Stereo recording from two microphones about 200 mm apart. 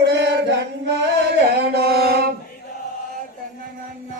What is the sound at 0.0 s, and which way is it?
Chant, 60° right (ahead or behind).